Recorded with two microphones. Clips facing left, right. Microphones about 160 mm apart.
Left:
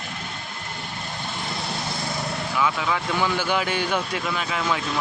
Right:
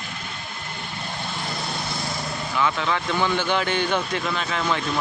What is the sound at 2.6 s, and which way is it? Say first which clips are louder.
A man's voice: right 1 dB; 5° left (ahead or behind).